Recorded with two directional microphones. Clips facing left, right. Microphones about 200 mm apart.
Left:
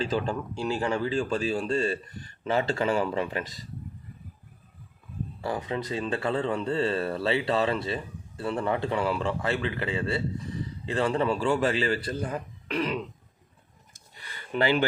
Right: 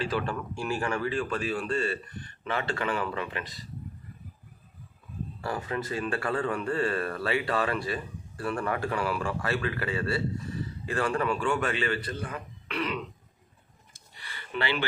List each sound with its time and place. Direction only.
0.0 s speech: 25° left (ahead or behind)
5.4 s speech: 15° left (ahead or behind); by 13.0 s 40° left (ahead or behind)
14.2 s a sound: 40° left (ahead or behind)